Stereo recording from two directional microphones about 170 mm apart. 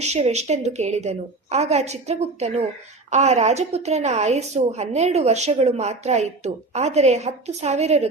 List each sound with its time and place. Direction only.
0.1 s a woman's voice: 40° right (ahead or behind)